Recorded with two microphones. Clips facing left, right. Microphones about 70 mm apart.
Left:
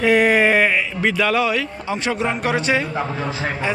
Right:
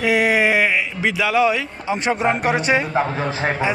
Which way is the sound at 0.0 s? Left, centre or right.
Centre.